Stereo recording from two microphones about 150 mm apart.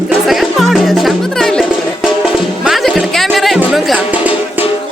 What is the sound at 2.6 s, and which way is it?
Music, centre (ahead or behind).